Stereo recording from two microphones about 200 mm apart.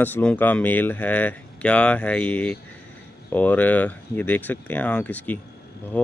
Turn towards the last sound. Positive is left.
turn(degrees=5)  # may be behind; listen again after turning